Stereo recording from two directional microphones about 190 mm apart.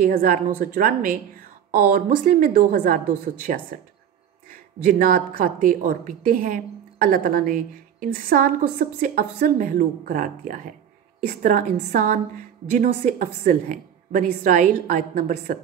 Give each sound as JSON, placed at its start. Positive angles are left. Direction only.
{"t": 0.0, "sound": "a woman's voice", "side_deg": -45}
{"t": 4.8, "sound": "a woman's voice", "side_deg": -45}